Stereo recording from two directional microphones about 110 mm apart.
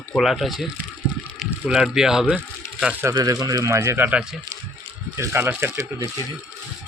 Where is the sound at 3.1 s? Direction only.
35° right (ahead or behind).